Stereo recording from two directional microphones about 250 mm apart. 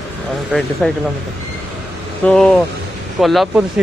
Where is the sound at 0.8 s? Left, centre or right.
Centre.